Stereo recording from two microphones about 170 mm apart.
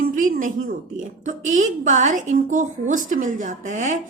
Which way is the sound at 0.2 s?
50° right (ahead or behind).